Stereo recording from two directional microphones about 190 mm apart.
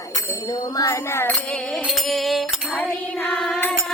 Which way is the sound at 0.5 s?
15° left (ahead or behind).